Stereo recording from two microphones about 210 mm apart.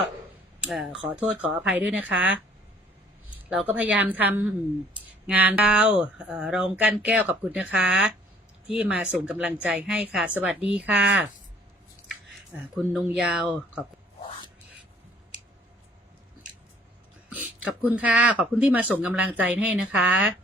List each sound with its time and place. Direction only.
0.6 s speech: centre (ahead or behind)
3.5 s speech: 5° right (ahead or behind)
12.7 s speech: 5° right (ahead or behind)
17.2 s speech: 5° right (ahead or behind)